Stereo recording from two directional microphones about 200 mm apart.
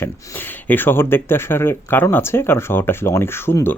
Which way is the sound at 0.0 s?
10° left (ahead or behind).